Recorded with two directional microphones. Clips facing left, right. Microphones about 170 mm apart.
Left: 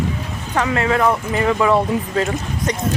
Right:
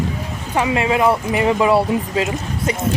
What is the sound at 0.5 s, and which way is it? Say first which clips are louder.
Speech: right 1 dB; 15° right (ahead or behind).